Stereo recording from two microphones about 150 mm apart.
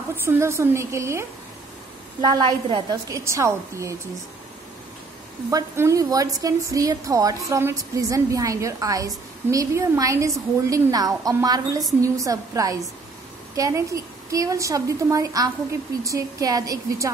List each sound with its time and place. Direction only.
0.1 s a woman's voice: 15° right (ahead or behind)
2.3 s a woman's voice: 30° right (ahead or behind)
5.5 s a woman's voice: 20° right (ahead or behind)